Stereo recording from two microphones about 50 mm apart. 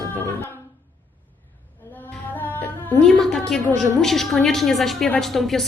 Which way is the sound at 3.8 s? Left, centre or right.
Centre.